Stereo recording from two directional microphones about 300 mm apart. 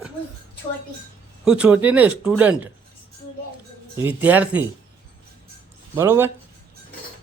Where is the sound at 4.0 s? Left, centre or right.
Centre.